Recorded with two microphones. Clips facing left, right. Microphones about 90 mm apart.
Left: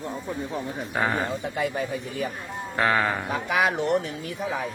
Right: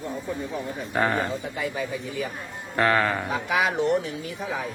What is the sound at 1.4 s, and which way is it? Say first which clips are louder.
Speech: left 2 dB; 55° left (ahead or behind).